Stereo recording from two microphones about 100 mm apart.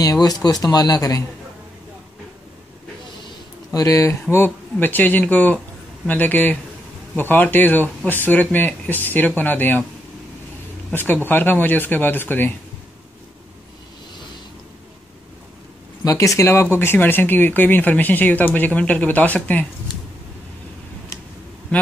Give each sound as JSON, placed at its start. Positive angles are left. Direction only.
{"t": 0.0, "sound": "speech", "side_deg": 40}
{"t": 3.7, "sound": "speech", "side_deg": 35}
{"t": 10.9, "sound": "speech", "side_deg": 20}
{"t": 16.0, "sound": "speech", "side_deg": 35}